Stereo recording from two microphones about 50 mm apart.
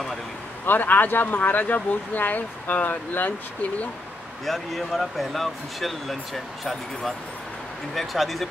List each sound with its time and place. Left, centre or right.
0.7 s speech: left
4.5 s speech: centre